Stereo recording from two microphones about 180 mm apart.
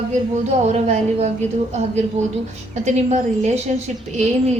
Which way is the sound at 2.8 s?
40° right (ahead or behind).